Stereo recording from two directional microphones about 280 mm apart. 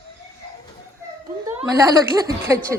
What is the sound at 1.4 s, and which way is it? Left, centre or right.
A woman's voice, centre.